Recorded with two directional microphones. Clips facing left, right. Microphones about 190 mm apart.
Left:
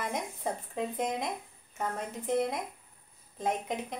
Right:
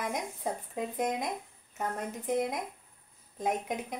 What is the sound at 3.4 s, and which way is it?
Music, centre (ahead or behind).